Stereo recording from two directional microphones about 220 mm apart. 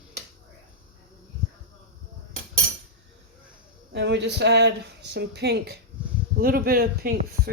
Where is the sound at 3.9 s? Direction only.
50° right (ahead or behind).